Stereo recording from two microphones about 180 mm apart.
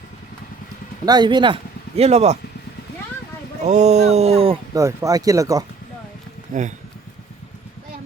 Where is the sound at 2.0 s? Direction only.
35° right (ahead or behind).